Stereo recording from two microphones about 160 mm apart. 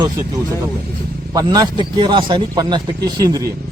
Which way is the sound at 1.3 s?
25° right (ahead or behind).